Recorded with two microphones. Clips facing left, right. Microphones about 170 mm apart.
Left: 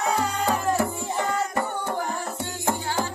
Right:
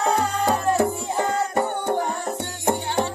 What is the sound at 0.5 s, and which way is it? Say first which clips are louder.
Music: right 4 dB; 20° right (ahead or behind).